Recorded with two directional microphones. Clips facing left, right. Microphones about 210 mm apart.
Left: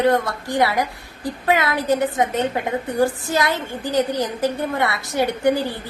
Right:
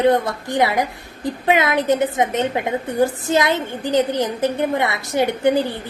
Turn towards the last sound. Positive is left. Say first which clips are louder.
# right 1 dB
turn(degrees=-20)  # may be behind; listen again after turning